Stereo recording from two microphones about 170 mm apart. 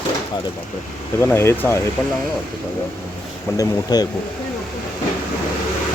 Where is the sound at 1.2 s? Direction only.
15° left (ahead or behind).